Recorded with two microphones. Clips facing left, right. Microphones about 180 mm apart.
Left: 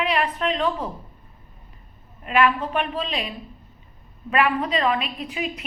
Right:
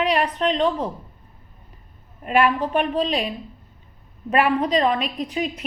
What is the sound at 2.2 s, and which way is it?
Speech, 40° right (ahead or behind).